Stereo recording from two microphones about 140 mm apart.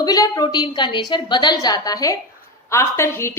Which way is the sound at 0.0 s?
25° left (ahead or behind).